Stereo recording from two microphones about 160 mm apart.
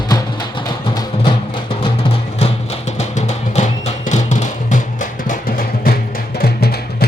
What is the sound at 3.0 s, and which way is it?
Music, 45° left (ahead or behind).